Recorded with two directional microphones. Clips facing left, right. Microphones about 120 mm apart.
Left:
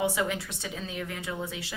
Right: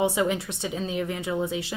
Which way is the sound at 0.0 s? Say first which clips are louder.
Right 5 dB; 20° right (ahead or behind).